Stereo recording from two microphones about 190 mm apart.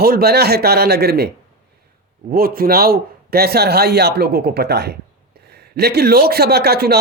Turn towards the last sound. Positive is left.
turn(degrees=-55)  # may be behind; listen again after turning